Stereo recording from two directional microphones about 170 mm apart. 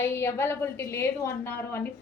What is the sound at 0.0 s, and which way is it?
A woman's voice, 15° left (ahead or behind).